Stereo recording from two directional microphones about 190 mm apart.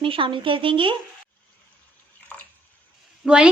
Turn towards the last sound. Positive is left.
turn(degrees=-5)  # may be behind; listen again after turning